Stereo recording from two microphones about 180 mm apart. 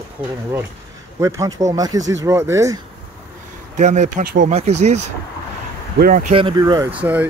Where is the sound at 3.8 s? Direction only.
40° right (ahead or behind).